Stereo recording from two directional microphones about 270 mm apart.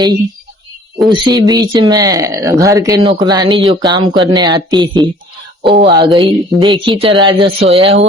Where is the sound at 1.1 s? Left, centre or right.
Centre.